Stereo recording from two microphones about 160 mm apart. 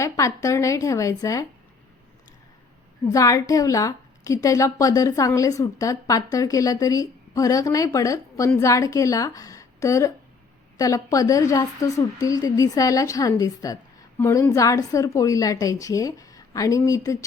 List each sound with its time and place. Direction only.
0.0 s a woman's voice: 20° left (ahead or behind)
3.1 s a woman's voice: 20° left (ahead or behind)